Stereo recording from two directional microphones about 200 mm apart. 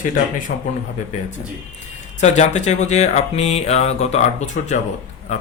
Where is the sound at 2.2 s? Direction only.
35° left (ahead or behind).